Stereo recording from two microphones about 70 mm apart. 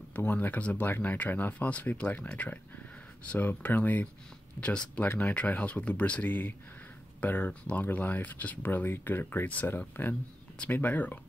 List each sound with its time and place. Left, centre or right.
0.1 s speech: left